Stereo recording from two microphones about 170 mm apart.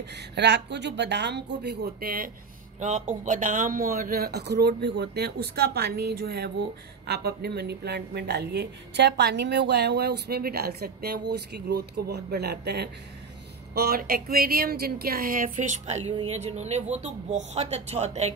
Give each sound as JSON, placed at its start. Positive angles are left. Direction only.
{"t": 0.4, "sound": "speech", "side_deg": -90}
{"t": 2.8, "sound": "a woman's voice", "side_deg": -45}
{"t": 13.7, "sound": "speech", "side_deg": -65}